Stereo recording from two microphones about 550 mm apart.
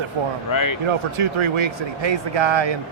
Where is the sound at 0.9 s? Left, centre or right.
Right.